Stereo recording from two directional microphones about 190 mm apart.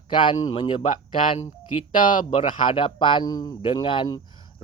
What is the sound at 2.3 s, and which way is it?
Speech, 30° left (ahead or behind).